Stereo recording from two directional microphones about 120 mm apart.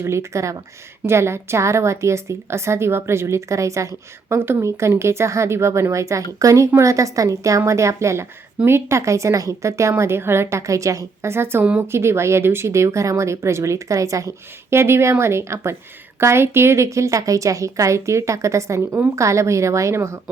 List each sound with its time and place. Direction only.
0.0 s a woman's voice: 25° right (ahead or behind)